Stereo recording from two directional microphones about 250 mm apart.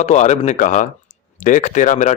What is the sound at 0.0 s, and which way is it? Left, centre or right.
A man's voice, left.